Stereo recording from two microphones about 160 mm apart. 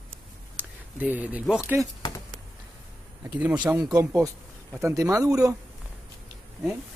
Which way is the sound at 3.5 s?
25° right (ahead or behind).